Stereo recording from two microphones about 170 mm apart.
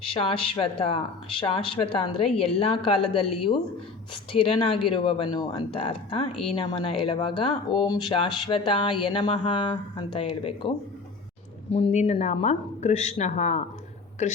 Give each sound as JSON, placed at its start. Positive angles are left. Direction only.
{"t": 0.0, "sound": "speech", "side_deg": 30}
{"t": 11.7, "sound": "speech", "side_deg": 40}